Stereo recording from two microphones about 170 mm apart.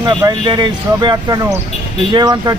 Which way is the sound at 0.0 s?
25° right (ahead or behind).